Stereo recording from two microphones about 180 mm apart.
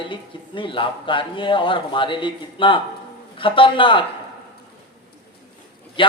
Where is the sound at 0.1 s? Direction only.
30° left (ahead or behind).